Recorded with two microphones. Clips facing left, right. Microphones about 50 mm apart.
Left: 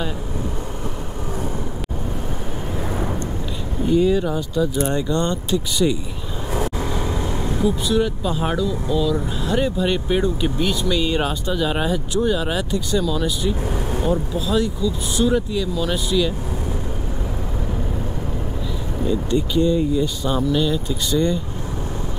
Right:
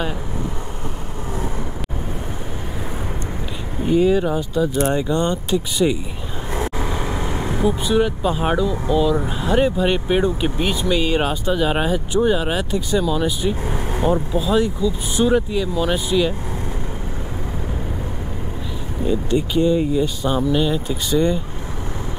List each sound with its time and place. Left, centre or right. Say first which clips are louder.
3.8 s speech: right 1 dB; centre
19.0 s speech: right 1 dB; right